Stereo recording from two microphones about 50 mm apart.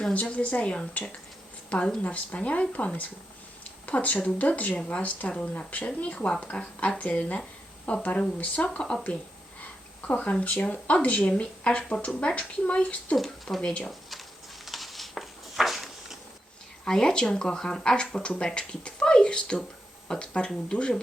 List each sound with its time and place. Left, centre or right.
0.0 s speech: left
10.1 s speech: left
13.1 s speech: centre
13.6 s speech: left
13.8 s a sound: centre
16.8 s speech: centre